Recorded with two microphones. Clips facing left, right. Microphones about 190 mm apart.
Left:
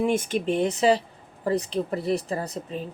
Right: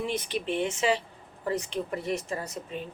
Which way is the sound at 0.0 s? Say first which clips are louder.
Left 7 dB; 50° left (ahead or behind).